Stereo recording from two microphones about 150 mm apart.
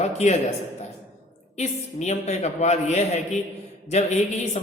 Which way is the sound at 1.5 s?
50° left (ahead or behind).